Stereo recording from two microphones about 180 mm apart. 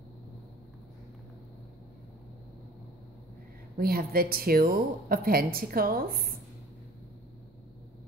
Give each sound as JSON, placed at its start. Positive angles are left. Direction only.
{"t": 3.7, "sound": "speech", "side_deg": -55}